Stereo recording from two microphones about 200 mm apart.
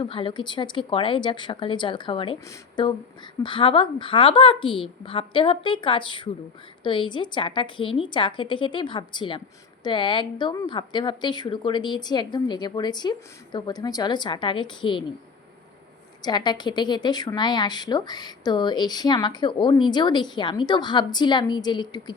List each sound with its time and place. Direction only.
0.0 s a woman's voice: 25° left (ahead or behind)
16.2 s a woman's voice: 20° left (ahead or behind)